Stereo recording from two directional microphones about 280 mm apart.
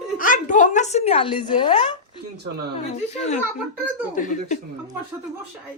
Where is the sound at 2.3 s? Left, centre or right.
Right.